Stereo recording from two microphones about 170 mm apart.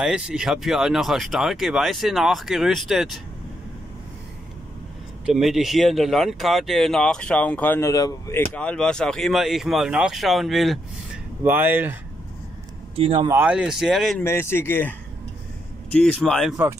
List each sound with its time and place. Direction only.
0.0 s speech: 5° right (ahead or behind)
5.2 s speech: centre (ahead or behind)
11.4 s speech: 10° right (ahead or behind)
12.9 s speech: 30° right (ahead or behind)
13.3 s speech: 10° right (ahead or behind)
14.2 s speech: 15° left (ahead or behind)